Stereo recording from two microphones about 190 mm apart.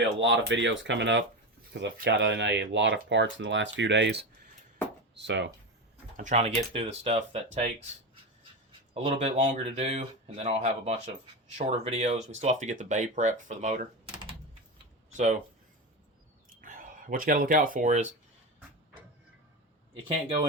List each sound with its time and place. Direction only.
0.0 s speech: 70° right (ahead or behind)
6.1 s speech: 40° right (ahead or behind)
9.0 s speech: 30° right (ahead or behind)
15.1 s speech: 40° right (ahead or behind)
16.6 s speech: 45° right (ahead or behind)
20.1 s speech: 30° right (ahead or behind)